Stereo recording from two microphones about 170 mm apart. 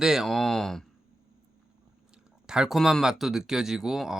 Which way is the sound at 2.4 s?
5° right (ahead or behind).